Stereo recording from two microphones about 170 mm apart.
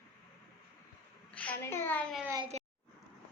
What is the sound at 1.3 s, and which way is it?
Speech, 10° left (ahead or behind).